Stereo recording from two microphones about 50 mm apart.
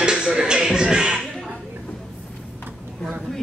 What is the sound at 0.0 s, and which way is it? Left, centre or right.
Music, centre.